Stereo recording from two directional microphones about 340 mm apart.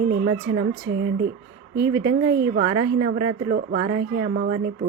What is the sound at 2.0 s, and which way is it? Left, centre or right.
A woman's voice, right.